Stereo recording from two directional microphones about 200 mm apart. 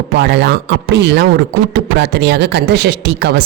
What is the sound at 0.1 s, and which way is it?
A woman's voice, 55° right (ahead or behind).